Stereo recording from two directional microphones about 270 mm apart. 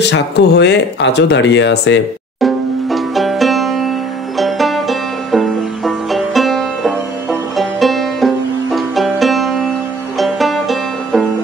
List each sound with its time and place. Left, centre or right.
0.0 s speech: left
2.4 s banjo: centre
4.4 s music: centre